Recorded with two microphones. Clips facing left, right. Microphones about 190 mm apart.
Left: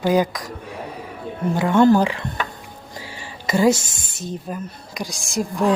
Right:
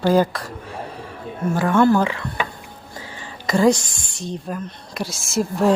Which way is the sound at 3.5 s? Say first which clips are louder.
Right 1 dB; 5° left (ahead or behind).